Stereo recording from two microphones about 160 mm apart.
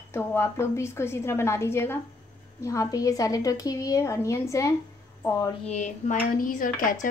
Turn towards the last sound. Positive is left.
turn(degrees=55)  # may be behind; listen again after turning